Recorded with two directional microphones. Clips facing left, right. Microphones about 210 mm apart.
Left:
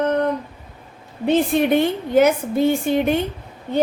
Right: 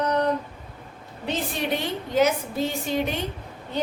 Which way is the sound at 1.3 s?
55° left (ahead or behind).